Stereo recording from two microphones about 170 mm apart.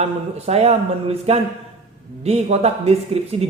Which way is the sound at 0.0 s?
40° right (ahead or behind).